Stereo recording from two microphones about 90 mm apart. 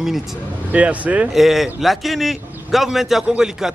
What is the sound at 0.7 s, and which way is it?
Speech, 15° right (ahead or behind).